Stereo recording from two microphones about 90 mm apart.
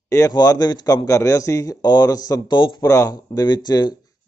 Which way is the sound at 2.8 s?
40° left (ahead or behind).